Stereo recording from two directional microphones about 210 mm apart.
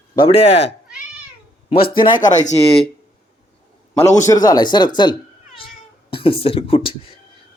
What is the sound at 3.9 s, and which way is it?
Speech, 15° left (ahead or behind).